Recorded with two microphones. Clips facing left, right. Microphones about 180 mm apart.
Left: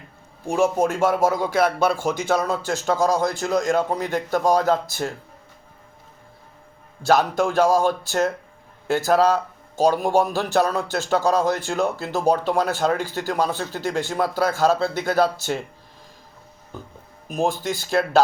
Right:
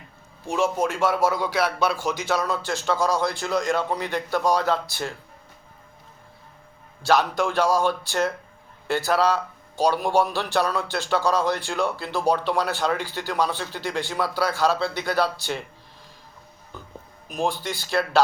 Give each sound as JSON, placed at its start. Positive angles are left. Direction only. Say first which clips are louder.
{"t": 0.5, "sound": "a man's voice", "louder": "left 4 dB", "side_deg": 45}
{"t": 7.0, "sound": "a man's voice", "louder": "left 2 dB", "side_deg": 45}
{"t": 17.2, "sound": "a man's voice", "louder": "left 3 dB", "side_deg": 45}